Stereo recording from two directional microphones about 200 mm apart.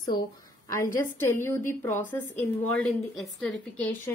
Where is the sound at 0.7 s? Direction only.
15° left (ahead or behind).